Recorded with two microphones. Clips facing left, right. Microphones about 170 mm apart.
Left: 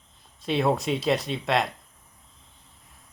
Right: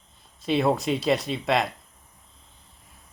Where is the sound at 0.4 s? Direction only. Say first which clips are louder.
Right 1 dB; centre (ahead or behind).